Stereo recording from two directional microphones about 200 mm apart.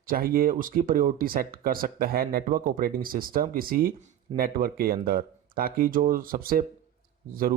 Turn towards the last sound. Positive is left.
turn(degrees=-45)  # may be behind; listen again after turning